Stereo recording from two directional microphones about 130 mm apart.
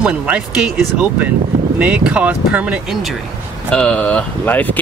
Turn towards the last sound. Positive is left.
turn(degrees=15)  # may be behind; listen again after turning